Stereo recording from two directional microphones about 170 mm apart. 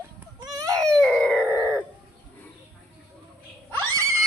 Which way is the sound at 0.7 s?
5° left (ahead or behind).